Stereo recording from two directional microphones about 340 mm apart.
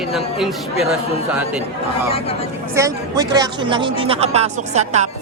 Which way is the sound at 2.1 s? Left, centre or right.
Centre.